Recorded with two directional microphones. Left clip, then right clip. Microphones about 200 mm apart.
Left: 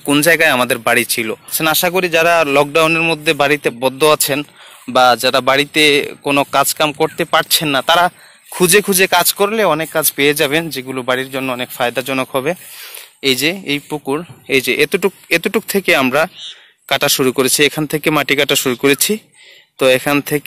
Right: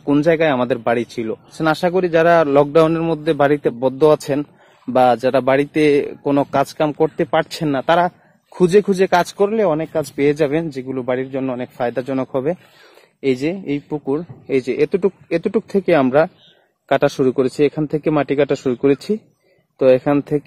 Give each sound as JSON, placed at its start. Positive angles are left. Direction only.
{"t": 0.1, "sound": "a man's voice", "side_deg": 0}
{"t": 13.8, "sound": "speech", "side_deg": 20}
{"t": 14.1, "sound": "speech", "side_deg": 10}
{"t": 18.6, "sound": "speech", "side_deg": 15}